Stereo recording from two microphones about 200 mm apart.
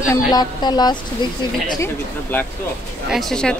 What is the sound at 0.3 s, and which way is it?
Speech, 20° left (ahead or behind).